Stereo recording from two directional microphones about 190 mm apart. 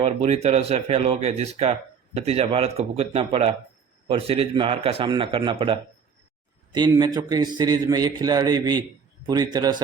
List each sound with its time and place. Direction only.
0.0 s a man's voice: 35° right (ahead or behind)
6.7 s a man's voice: 20° right (ahead or behind)